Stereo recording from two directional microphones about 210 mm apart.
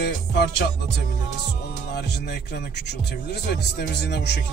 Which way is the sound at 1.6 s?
50° left (ahead or behind).